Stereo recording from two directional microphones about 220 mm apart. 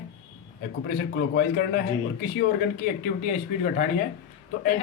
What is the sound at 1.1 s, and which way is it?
Speech, 45° left (ahead or behind).